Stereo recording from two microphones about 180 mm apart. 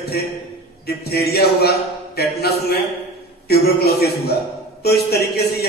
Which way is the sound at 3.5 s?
60° left (ahead or behind).